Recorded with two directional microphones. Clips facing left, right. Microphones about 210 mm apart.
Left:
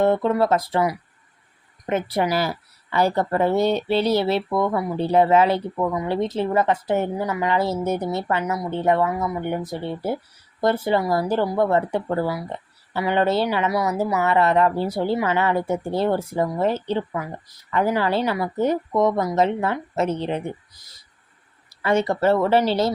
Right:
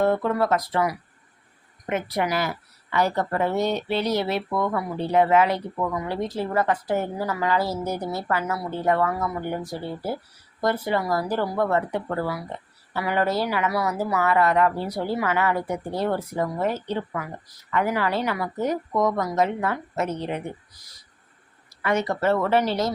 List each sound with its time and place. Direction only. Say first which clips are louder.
0.0 s speech: left 3 dB; 25° left (ahead or behind)
21.8 s speech: left 4 dB; 30° left (ahead or behind)